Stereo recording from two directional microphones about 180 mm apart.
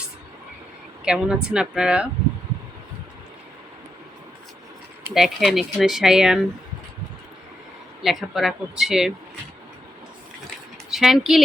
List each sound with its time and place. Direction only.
1.0 s speech: 5° right (ahead or behind)
5.1 s speech: centre (ahead or behind)
8.0 s speech: centre (ahead or behind)
10.9 s speech: centre (ahead or behind)